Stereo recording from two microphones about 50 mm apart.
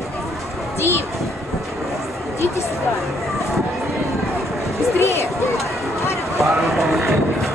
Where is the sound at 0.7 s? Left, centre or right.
Left.